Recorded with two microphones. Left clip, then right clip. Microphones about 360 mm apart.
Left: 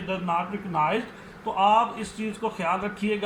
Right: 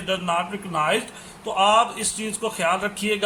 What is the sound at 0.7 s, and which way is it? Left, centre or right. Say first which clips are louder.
A man's voice: right 3 dB; right.